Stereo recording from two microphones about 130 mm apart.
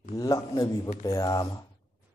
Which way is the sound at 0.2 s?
25° left (ahead or behind).